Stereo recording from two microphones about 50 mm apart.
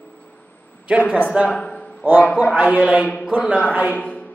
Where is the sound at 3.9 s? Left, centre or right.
Left.